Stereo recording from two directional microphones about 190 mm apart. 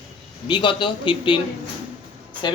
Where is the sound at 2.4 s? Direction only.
25° left (ahead or behind).